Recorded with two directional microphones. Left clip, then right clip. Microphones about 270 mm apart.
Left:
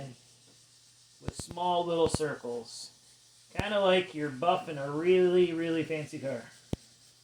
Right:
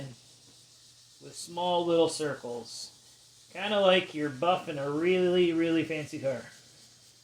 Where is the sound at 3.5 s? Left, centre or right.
Centre.